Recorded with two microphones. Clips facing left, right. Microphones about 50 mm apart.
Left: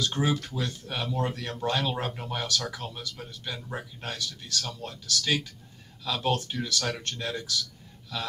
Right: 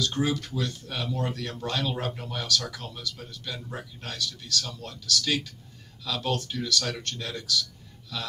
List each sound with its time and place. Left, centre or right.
0.0 s speech: left